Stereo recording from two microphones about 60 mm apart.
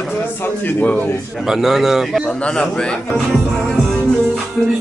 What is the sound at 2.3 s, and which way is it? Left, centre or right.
Speech, centre.